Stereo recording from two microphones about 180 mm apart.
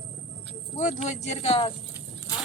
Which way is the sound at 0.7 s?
40° left (ahead or behind).